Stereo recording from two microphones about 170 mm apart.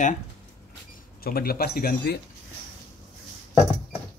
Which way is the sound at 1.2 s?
65° left (ahead or behind).